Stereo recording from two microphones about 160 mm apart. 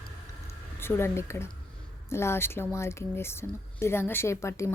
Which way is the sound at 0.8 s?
15° left (ahead or behind).